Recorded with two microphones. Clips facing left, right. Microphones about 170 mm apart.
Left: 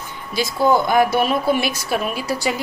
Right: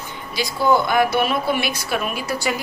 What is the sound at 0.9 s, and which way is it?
A woman's voice, 40° left (ahead or behind).